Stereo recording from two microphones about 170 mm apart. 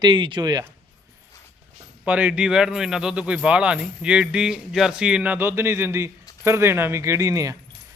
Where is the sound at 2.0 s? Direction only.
10° right (ahead or behind).